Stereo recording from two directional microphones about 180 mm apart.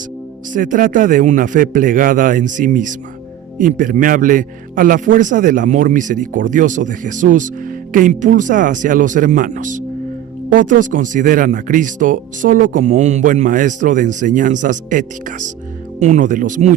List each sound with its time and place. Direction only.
0.5 s speech: 50° right (ahead or behind)